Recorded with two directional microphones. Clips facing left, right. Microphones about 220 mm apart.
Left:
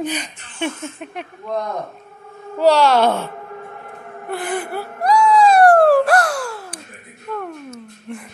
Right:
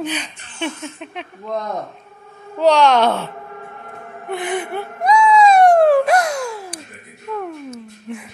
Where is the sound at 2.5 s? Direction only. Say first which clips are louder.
Even; 10° left (ahead or behind).